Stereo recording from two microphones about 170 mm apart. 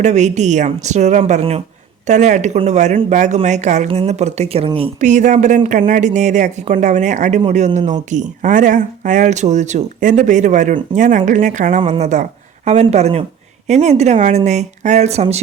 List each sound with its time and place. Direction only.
0.0 s speech: 45° right (ahead or behind)
5.0 s speech: 45° right (ahead or behind)